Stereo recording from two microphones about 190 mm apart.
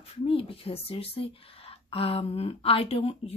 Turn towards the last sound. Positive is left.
turn(degrees=30)  # may be behind; listen again after turning